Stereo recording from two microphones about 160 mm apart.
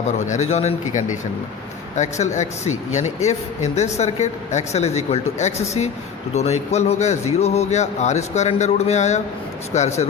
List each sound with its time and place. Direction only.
0.2 s speech: 45° left (ahead or behind)